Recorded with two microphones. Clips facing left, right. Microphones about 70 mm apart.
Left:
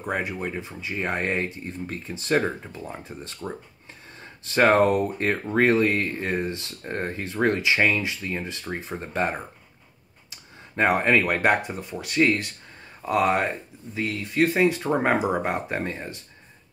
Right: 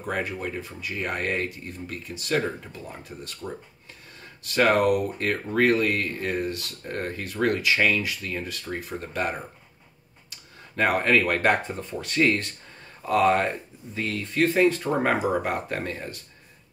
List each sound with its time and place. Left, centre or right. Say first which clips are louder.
0.0 s speech: left 1 dB; centre